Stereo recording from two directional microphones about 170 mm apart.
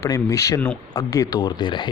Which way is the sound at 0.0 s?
20° left (ahead or behind).